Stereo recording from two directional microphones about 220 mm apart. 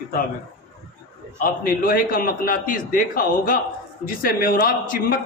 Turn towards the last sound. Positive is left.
turn(degrees=40)  # may be behind; listen again after turning